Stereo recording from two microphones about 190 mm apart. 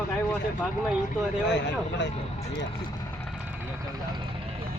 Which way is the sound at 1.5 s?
70° left (ahead or behind).